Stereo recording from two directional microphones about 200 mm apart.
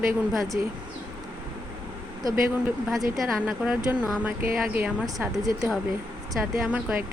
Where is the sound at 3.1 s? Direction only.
Centre (ahead or behind).